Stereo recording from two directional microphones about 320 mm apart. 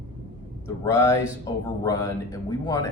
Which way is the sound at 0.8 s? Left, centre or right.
Centre.